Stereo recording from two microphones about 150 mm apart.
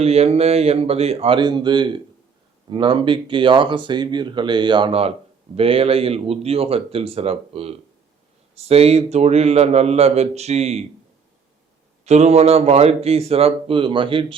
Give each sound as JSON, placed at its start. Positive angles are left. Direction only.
{"t": 0.0, "sound": "a man's voice", "side_deg": -45}
{"t": 12.0, "sound": "a man's voice", "side_deg": -50}